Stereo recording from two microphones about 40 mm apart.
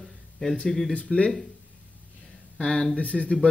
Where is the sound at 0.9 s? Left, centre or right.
Left.